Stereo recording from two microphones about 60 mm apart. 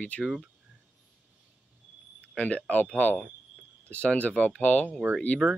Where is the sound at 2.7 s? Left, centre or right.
Left.